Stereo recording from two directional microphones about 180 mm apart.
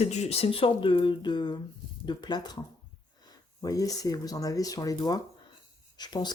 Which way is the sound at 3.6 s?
20° left (ahead or behind).